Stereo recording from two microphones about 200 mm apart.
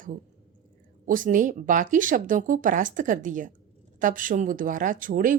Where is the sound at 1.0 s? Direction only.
40° right (ahead or behind).